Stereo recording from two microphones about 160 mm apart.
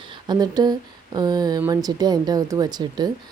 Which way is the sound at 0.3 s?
25° right (ahead or behind).